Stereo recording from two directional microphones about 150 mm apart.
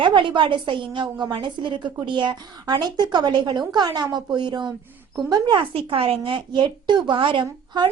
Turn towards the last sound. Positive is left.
turn(degrees=-30)  # may be behind; listen again after turning